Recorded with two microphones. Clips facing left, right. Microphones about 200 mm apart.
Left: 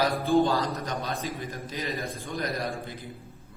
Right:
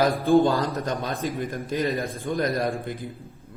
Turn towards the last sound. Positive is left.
turn(degrees=-55)  # may be behind; listen again after turning